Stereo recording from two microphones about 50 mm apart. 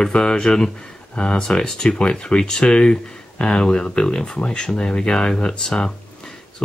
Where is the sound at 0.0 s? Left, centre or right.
Centre.